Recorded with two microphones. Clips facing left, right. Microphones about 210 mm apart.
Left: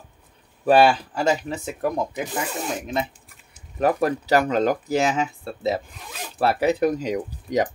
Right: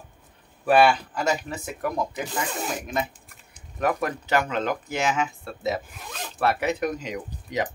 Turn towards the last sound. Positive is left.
turn(degrees=40)  # may be behind; listen again after turning